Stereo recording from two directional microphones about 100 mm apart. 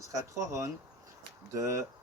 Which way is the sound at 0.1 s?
30° right (ahead or behind).